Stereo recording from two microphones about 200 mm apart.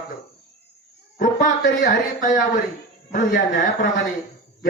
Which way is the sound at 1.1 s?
45° left (ahead or behind).